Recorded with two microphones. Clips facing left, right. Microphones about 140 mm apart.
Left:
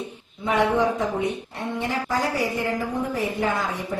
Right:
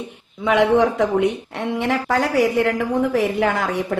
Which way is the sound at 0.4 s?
85° right.